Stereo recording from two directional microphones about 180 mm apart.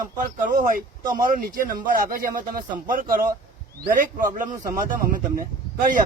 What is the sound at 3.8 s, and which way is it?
Speech, 50° right (ahead or behind).